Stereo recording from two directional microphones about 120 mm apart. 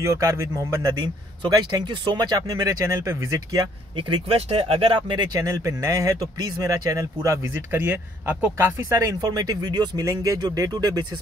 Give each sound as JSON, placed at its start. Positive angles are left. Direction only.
{"t": 0.0, "sound": "speech", "side_deg": -25}
{"t": 1.4, "sound": "speech", "side_deg": -35}
{"t": 3.9, "sound": "speech", "side_deg": -50}
{"t": 7.8, "sound": "speech", "side_deg": -15}